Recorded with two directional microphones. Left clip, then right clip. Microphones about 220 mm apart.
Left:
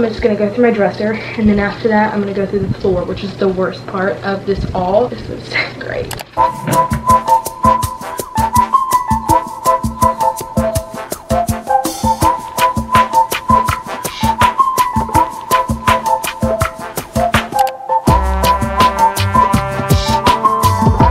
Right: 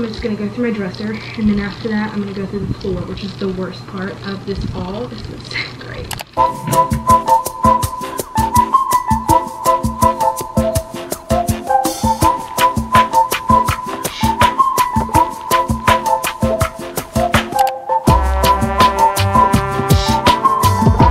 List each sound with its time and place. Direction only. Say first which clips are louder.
0.0 s a woman's voice: left 8 dB; 10° left (ahead or behind)
6.3 s music: left 1 dB; centre (ahead or behind)